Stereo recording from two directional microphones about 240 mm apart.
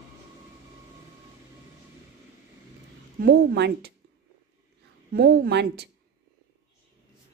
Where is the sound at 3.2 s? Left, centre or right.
Right.